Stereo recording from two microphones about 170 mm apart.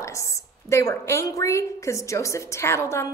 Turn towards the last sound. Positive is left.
turn(degrees=15)  # may be behind; listen again after turning